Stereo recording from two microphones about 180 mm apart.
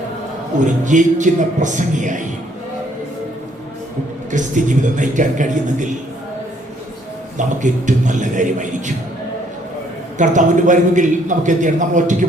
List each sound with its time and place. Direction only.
0.6 s a man's voice: 45° right (ahead or behind)
4.3 s a man's voice: 45° right (ahead or behind)
7.3 s a man's voice: 45° right (ahead or behind)
10.2 s a man's voice: 45° right (ahead or behind)